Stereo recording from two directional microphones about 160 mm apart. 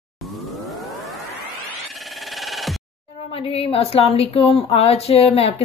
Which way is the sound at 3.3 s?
35° left (ahead or behind).